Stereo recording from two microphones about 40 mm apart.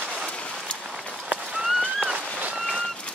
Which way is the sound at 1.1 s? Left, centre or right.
Right.